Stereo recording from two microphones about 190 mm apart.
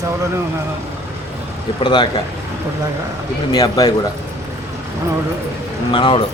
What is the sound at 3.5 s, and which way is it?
Speech, 20° left (ahead or behind).